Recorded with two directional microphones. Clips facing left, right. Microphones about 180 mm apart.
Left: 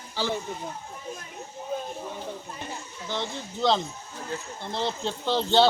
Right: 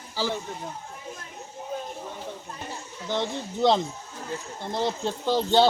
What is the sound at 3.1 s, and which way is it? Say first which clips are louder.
Speech: right 4 dB; 15° right (ahead or behind).